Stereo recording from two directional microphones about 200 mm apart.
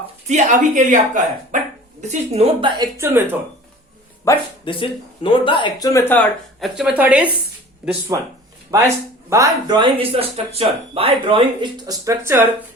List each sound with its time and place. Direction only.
0.3 s speech: 40° right (ahead or behind); by 3.2 s 15° right (ahead or behind)
4.3 s speech: 25° left (ahead or behind); by 8.3 s 15° right (ahead or behind)
9.3 s speech: 20° right (ahead or behind)